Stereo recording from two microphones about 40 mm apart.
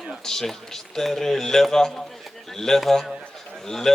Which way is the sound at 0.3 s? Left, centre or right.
Centre.